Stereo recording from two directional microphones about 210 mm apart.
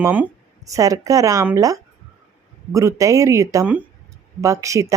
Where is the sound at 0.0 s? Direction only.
10° right (ahead or behind).